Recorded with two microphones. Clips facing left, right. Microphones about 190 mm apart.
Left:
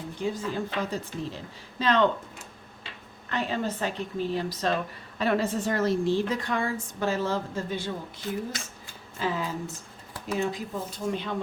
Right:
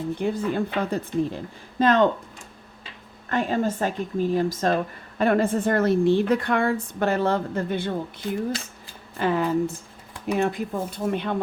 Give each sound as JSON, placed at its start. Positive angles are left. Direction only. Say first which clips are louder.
{"t": 0.2, "sound": "speech", "louder": "right 3 dB", "side_deg": -60}
{"t": 3.2, "sound": "speech", "louder": "right 6 dB", "side_deg": -50}
{"t": 9.1, "sound": "speech", "louder": "right 8 dB", "side_deg": -60}